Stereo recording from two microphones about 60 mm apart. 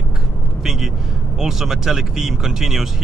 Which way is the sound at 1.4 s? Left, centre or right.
Centre.